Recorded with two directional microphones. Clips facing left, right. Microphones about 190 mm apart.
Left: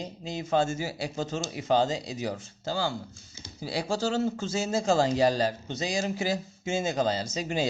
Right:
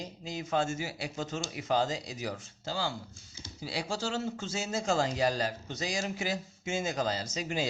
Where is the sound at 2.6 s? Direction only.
45° left (ahead or behind).